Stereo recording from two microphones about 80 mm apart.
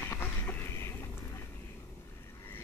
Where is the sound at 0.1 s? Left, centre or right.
Left.